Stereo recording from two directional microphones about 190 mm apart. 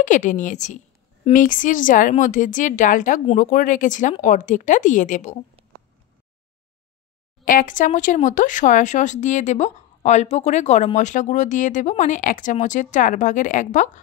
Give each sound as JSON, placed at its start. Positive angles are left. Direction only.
{"t": 0.0, "sound": "speech", "side_deg": 40}
{"t": 7.4, "sound": "speech", "side_deg": 45}